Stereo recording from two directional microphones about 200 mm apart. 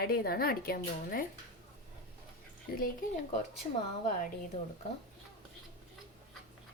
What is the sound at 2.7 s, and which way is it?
Speech, 50° left (ahead or behind).